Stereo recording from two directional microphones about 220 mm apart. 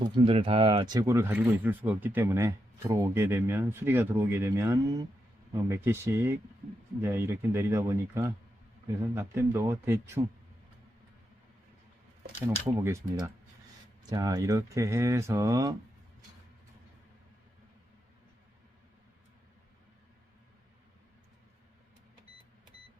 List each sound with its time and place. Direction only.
0.0 s speech: 25° right (ahead or behind)
12.8 s speech: 15° right (ahead or behind)